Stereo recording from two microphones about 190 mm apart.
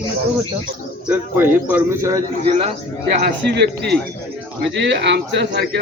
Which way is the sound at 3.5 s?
60° right (ahead or behind).